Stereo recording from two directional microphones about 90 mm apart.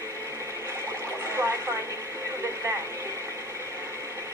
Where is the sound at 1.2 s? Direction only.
30° right (ahead or behind).